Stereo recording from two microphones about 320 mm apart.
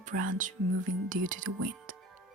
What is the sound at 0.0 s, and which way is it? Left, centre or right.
Speech, right.